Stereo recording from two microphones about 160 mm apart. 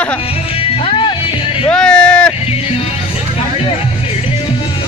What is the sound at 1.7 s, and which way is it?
Speech, 5° left (ahead or behind).